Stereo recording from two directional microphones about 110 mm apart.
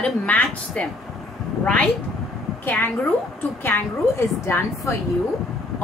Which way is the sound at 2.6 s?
15° left (ahead or behind).